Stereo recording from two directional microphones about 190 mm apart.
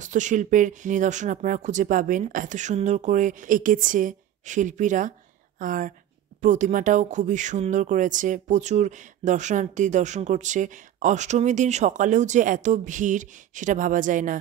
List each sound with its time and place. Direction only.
0.0 s speech: 40° right (ahead or behind)